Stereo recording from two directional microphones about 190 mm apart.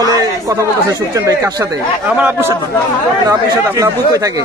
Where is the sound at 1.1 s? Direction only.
15° right (ahead or behind).